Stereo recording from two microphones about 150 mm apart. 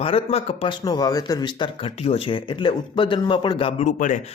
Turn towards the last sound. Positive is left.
turn(degrees=60)  # may be behind; listen again after turning